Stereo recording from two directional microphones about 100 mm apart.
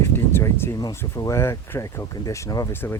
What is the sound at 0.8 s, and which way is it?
Speech, 35° left (ahead or behind).